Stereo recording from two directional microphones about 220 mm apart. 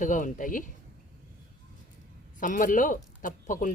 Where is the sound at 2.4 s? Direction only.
35° left (ahead or behind).